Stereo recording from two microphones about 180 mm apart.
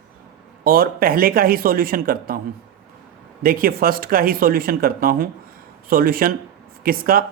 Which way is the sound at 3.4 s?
55° right (ahead or behind).